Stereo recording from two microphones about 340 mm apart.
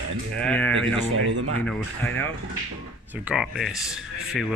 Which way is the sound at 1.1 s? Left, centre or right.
Right.